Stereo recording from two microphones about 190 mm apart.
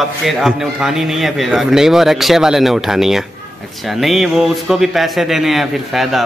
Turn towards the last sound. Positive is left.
turn(degrees=0)  # may be behind; listen again after turning